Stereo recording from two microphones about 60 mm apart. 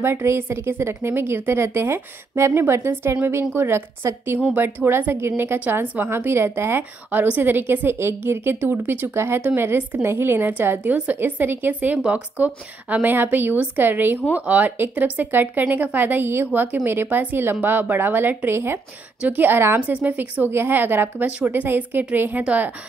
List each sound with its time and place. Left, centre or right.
0.0 s a woman's voice: right
6.8 s a woman's voice: right
10.8 s a woman's voice: right
19.2 s a woman's voice: right
19.9 s speech: right
20.4 s a woman's voice: right